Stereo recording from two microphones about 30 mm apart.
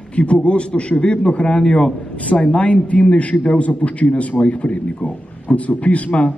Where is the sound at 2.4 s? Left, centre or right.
Left.